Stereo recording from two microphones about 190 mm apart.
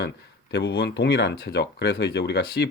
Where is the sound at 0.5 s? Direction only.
55° left (ahead or behind).